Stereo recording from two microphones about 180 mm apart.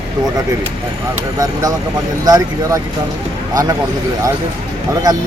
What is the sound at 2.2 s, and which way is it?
Speech, 20° right (ahead or behind).